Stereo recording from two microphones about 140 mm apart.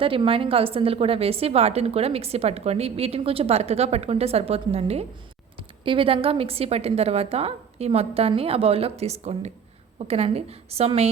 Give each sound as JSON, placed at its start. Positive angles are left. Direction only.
{"t": 0.0, "sound": "a woman's voice", "side_deg": -40}